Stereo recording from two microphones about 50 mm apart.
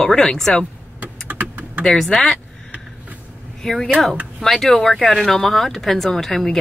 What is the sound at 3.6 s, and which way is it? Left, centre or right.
Speech, centre.